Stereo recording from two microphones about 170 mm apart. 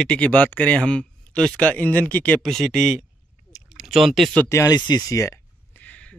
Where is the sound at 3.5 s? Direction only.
5° right (ahead or behind).